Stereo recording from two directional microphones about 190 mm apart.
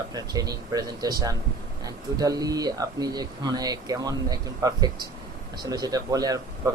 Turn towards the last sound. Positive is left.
turn(degrees=-20)  # may be behind; listen again after turning